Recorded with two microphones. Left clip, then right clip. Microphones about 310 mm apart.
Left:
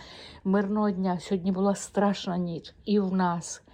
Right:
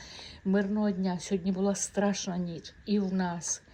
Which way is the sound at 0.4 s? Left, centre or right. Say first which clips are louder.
Left 3 dB; left.